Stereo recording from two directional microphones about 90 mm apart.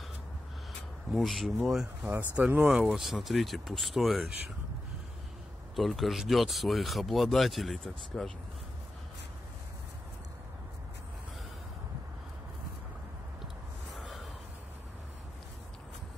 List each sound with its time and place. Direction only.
1.1 s speech: centre (ahead or behind)
2.0 s speech: 15° right (ahead or behind)
5.8 s speech: centre (ahead or behind)
13.9 s a sound: centre (ahead or behind)